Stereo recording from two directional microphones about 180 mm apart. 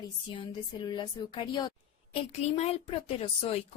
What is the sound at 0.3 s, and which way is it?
A woman's voice, 25° left (ahead or behind).